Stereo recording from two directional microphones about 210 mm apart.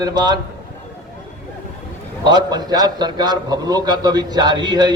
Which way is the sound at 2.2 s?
20° right (ahead or behind).